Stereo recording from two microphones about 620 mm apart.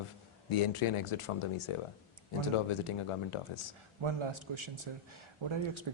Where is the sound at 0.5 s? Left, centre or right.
Left.